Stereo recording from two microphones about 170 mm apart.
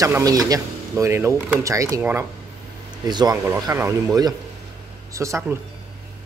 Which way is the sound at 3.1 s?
25° right (ahead or behind).